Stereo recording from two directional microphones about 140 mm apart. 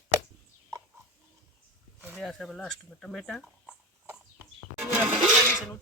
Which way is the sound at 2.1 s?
Centre (ahead or behind).